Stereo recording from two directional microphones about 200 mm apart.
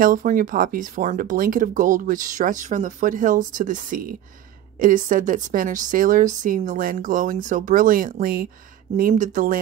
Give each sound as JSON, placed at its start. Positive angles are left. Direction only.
{"t": 0.0, "sound": "speech", "side_deg": -45}